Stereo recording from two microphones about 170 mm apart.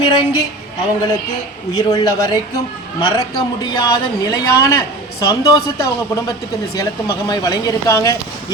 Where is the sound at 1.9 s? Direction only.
20° left (ahead or behind).